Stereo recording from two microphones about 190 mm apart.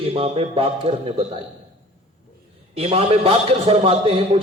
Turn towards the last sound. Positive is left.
turn(degrees=-30)  # may be behind; listen again after turning